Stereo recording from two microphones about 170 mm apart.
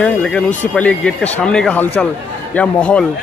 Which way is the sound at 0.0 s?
10° left (ahead or behind).